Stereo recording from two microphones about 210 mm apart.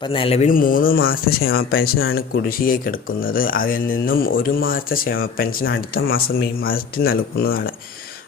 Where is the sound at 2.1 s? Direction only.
45° left (ahead or behind).